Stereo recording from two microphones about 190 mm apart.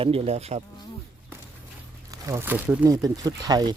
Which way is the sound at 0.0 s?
30° right (ahead or behind).